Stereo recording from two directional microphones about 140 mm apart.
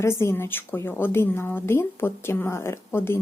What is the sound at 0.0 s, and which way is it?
Speech, 20° left (ahead or behind).